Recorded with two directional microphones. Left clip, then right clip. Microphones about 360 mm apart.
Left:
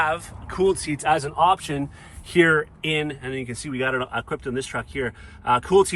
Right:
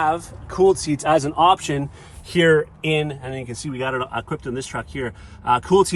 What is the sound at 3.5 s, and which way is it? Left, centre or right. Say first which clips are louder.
Speech: even; centre.